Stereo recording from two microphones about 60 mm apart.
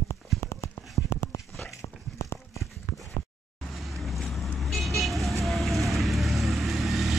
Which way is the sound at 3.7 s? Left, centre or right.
Centre.